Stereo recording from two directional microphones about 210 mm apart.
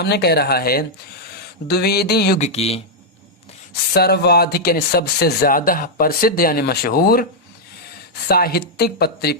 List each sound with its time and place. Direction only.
0.0 s speech: 50° left (ahead or behind)
2.4 s speech: 30° left (ahead or behind)
3.9 s speech: 50° left (ahead or behind)
8.3 s speech: 45° left (ahead or behind)